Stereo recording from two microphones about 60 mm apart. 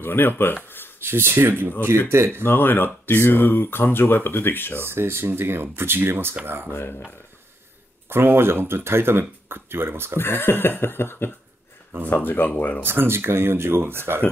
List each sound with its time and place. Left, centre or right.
0.0 s speech: left
0.7 s a sound: left
1.0 s speech: right
2.4 s speech: left
4.7 s speech: right
8.1 s speech: right
10.1 s speech: left
12.1 s speech: left
12.8 s speech: right